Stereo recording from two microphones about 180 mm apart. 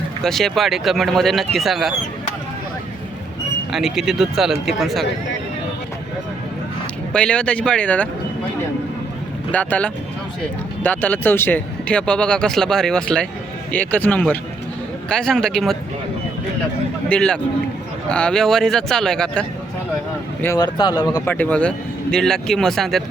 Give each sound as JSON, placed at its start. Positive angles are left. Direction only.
{"t": 0.2, "sound": "speech", "side_deg": 0}
{"t": 3.7, "sound": "speech", "side_deg": 0}
{"t": 7.1, "sound": "speech", "side_deg": 5}
{"t": 9.5, "sound": "speech", "side_deg": 10}
{"t": 17.1, "sound": "speech", "side_deg": 5}
{"t": 20.4, "sound": "speech", "side_deg": 20}
{"t": 21.2, "sound": "speech", "side_deg": 10}